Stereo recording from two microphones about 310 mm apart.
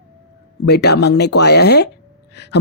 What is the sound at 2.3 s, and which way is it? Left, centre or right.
Gasp, left.